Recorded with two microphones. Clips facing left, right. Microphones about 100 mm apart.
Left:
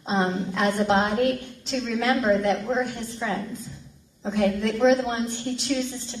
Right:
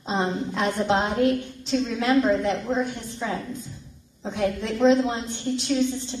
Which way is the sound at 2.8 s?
35° right (ahead or behind).